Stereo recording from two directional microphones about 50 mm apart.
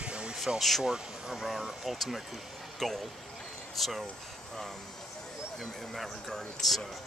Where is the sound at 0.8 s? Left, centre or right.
Centre.